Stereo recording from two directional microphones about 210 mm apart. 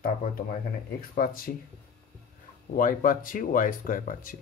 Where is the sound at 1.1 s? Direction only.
40° left (ahead or behind).